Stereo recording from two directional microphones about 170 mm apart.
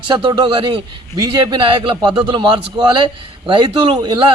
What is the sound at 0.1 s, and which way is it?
A man's voice, 25° right (ahead or behind).